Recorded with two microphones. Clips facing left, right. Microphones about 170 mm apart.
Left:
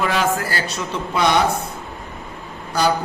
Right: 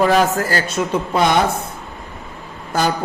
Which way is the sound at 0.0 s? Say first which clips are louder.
Right 5 dB; 40° right (ahead or behind).